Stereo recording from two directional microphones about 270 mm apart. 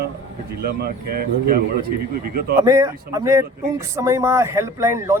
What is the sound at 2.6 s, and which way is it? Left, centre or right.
Speech, centre.